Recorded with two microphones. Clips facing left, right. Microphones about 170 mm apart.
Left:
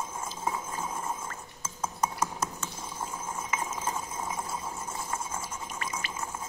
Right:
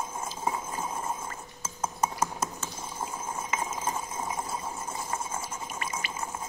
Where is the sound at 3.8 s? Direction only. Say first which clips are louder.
Right 1 dB; 15° right (ahead or behind).